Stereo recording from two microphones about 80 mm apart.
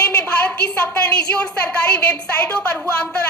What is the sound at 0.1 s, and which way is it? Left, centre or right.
A woman's voice, centre.